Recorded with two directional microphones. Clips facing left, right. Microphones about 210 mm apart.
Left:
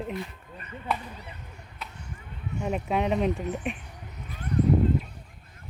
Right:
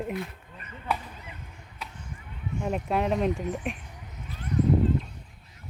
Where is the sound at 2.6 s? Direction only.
Centre (ahead or behind).